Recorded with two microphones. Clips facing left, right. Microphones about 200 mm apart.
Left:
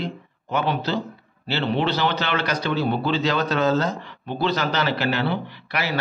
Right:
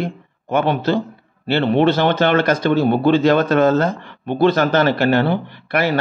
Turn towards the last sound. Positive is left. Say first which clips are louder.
# right 8 dB
turn(degrees=-50)  # may be behind; listen again after turning